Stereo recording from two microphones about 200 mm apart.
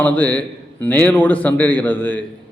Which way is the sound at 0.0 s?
10° left (ahead or behind).